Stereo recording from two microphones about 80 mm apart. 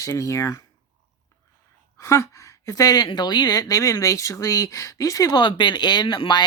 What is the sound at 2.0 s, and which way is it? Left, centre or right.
A woman's voice, left.